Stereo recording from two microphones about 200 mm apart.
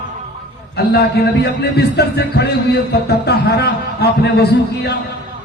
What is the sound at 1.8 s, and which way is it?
Speech, 55° left (ahead or behind).